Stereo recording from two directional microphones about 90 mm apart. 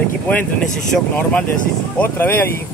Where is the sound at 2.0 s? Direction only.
25° left (ahead or behind).